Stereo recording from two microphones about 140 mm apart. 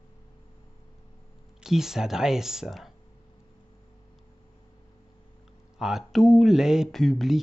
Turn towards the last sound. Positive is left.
turn(degrees=0)  # may be behind; listen again after turning